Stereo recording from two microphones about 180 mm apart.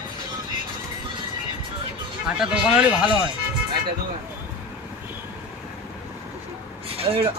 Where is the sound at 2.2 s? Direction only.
5° right (ahead or behind).